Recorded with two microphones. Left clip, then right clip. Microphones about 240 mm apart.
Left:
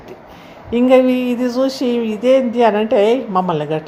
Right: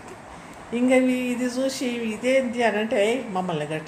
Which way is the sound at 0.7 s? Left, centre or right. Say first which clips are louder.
Left 9 dB; left.